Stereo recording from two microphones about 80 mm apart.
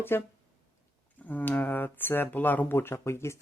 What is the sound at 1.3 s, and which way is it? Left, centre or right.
Speech, left.